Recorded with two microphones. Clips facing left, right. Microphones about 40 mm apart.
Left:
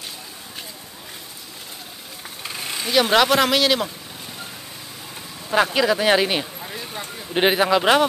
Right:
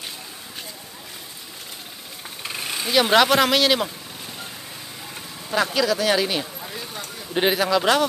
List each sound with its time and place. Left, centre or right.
2.4 s speech: centre
5.5 s speech: left
6.6 s a sound: centre
7.3 s speech: left